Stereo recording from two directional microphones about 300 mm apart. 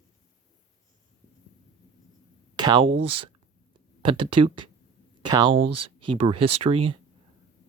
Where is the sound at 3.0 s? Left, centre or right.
Right.